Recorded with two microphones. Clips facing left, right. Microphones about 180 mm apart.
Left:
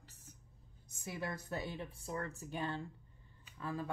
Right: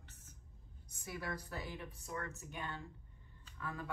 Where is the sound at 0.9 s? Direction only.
25° left (ahead or behind).